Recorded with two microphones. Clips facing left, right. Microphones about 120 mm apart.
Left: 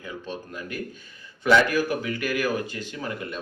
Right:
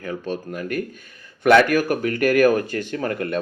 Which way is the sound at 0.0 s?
55° right (ahead or behind).